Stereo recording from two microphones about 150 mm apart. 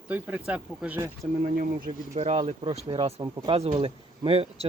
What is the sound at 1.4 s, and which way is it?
Speech, 65° right (ahead or behind).